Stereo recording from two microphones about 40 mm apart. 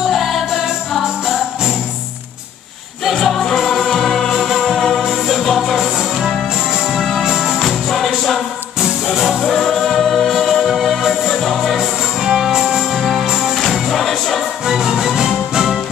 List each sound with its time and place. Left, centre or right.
0.1 s music: centre
3.1 s music: centre
6.9 s music: centre
7.6 s music: centre
9.1 s music: centre
9.5 s music: centre
13.6 s music: centre
14.7 s music: centre